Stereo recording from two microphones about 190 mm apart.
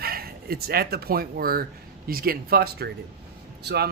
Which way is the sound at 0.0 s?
50° right (ahead or behind).